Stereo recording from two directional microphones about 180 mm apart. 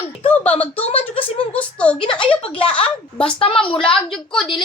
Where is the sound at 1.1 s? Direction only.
30° left (ahead or behind).